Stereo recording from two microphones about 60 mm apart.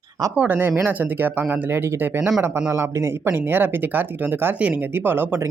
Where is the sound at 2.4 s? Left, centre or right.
Right.